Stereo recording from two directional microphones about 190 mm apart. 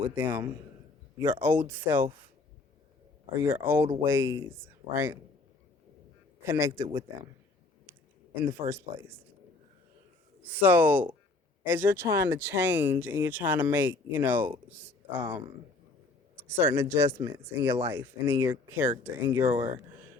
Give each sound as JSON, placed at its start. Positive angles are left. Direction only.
{"t": 0.2, "sound": "speech", "side_deg": -10}
{"t": 3.3, "sound": "speech", "side_deg": -10}
{"t": 6.4, "sound": "a man's voice", "side_deg": -15}
{"t": 8.4, "sound": "speech", "side_deg": -10}
{"t": 10.4, "sound": "speech", "side_deg": -10}
{"t": 16.4, "sound": "a man's voice", "side_deg": -10}